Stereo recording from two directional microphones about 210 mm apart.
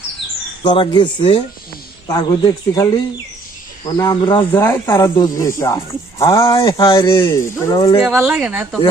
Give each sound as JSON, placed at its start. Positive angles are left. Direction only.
{"t": 0.6, "sound": "speech", "side_deg": 20}
{"t": 3.9, "sound": "speech", "side_deg": 20}
{"t": 8.0, "sound": "speech", "side_deg": -5}